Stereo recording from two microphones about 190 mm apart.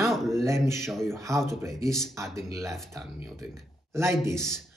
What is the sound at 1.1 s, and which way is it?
Speech, 15° right (ahead or behind).